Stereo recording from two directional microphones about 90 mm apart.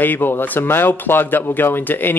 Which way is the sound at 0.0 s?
20° left (ahead or behind).